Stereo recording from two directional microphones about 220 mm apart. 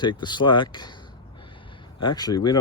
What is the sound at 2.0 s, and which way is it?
Speech, 20° left (ahead or behind).